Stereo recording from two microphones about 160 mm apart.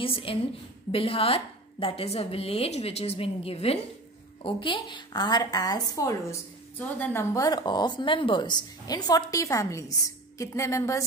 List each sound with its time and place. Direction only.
0.0 s a woman's voice: 35° left (ahead or behind); by 11.1 s 20° left (ahead or behind)